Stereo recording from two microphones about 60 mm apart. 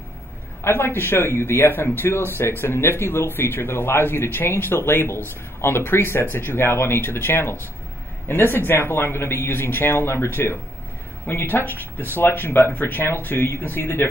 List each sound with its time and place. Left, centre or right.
0.7 s speech: left